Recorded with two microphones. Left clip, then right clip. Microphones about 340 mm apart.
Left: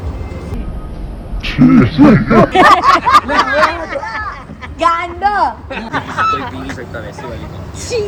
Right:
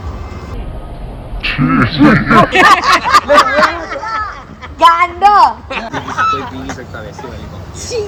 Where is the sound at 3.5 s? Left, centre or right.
Left.